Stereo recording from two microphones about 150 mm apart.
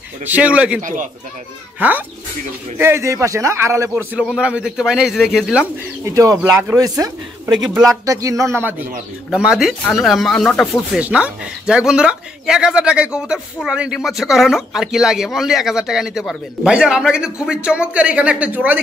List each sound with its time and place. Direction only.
0.2 s a man's voice: 10° right (ahead or behind)
1.8 s a man's voice: 10° right (ahead or behind)
3.9 s speech: 5° right (ahead or behind)
6.0 s a man's voice: 20° right (ahead or behind)
7.6 s speech: 5° right (ahead or behind)
8.0 s a man's voice: 20° right (ahead or behind); by 10.8 s 5° left (ahead or behind)
10.9 s speech: 10° right (ahead or behind)